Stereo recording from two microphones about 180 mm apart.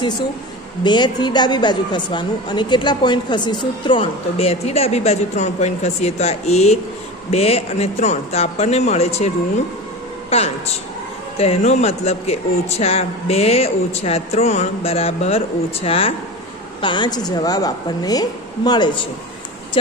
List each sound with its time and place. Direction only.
0.8 s a woman's voice: 25° left (ahead or behind)
10.3 s a man's voice: 35° left (ahead or behind)